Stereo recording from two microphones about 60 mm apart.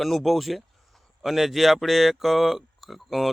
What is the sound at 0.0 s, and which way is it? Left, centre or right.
Speech, centre.